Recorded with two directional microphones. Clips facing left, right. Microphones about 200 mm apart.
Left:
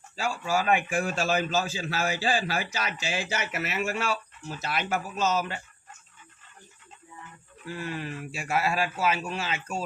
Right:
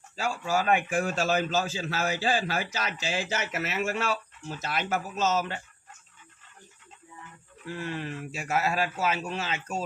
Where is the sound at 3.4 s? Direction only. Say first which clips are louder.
Even; 45° right (ahead or behind).